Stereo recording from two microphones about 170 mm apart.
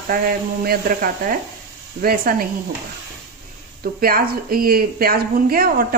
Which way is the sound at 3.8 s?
60° right (ahead or behind).